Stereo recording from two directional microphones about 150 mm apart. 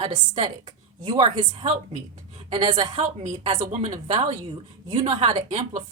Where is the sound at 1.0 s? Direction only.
30° right (ahead or behind).